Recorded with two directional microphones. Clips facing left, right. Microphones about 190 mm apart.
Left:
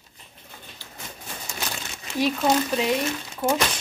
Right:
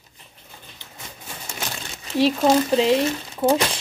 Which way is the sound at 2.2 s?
30° right (ahead or behind).